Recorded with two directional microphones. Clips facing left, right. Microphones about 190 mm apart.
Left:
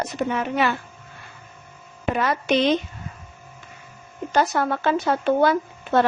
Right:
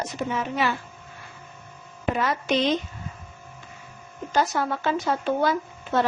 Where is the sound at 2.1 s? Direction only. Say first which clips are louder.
Left 3 dB; 65° left (ahead or behind).